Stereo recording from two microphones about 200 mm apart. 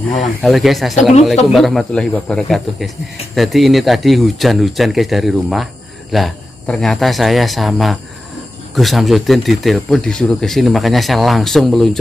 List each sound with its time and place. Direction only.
0.2 s speech: centre (ahead or behind)